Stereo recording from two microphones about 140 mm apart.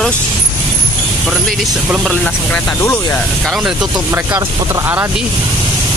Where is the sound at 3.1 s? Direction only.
Centre (ahead or behind).